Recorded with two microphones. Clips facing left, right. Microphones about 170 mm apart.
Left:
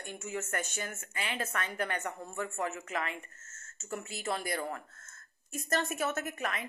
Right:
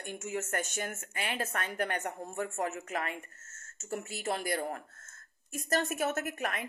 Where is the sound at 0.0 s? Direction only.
50° right (ahead or behind).